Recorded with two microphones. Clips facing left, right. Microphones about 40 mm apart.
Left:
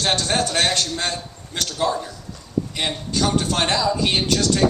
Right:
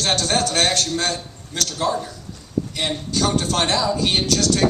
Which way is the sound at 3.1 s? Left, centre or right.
Left.